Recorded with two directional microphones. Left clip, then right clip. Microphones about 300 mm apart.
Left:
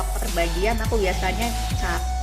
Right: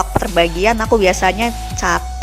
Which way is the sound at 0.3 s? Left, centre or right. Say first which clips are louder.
Right 9 dB; right.